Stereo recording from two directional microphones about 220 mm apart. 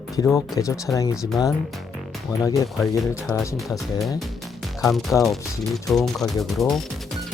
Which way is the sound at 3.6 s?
Centre (ahead or behind).